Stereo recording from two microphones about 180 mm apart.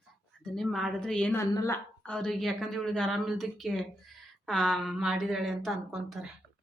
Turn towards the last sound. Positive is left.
turn(degrees=0)  # may be behind; listen again after turning